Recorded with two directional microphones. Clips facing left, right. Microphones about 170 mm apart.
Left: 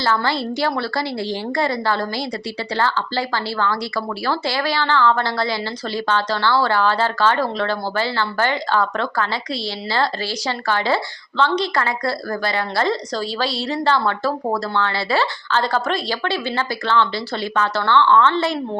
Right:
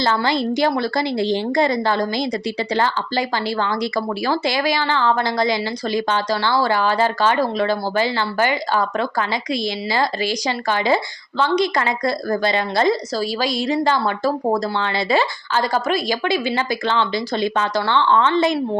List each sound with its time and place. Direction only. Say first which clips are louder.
0.0 s a woman's voice: right 2 dB; 20° right (ahead or behind)